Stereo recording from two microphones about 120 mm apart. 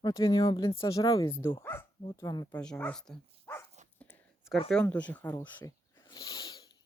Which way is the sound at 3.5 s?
20° left (ahead or behind).